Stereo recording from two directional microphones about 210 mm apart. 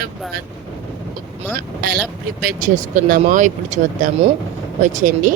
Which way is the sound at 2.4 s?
40° right (ahead or behind).